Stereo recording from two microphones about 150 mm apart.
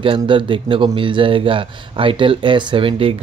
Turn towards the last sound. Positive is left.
turn(degrees=-35)  # may be behind; listen again after turning